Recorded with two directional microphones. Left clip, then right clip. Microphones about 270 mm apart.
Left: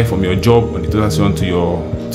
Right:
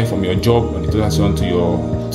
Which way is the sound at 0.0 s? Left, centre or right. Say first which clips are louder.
Left 2 dB; centre.